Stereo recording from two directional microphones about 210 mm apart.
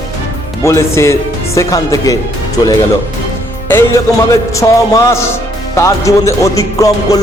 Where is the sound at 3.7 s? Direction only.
10° left (ahead or behind).